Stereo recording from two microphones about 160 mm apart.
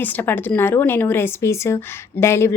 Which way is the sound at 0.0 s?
10° left (ahead or behind).